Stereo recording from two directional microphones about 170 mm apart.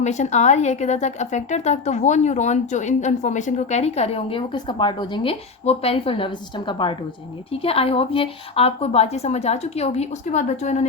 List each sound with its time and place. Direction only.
0.0 s a woman's voice: 45° left (ahead or behind)